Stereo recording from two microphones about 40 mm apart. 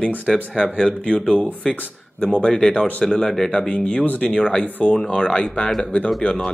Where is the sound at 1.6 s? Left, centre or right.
Centre.